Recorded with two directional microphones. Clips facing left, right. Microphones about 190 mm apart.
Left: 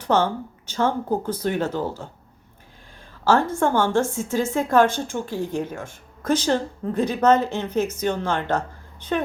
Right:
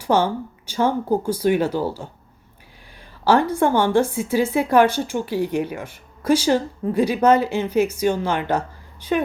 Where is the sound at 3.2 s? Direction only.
15° right (ahead or behind).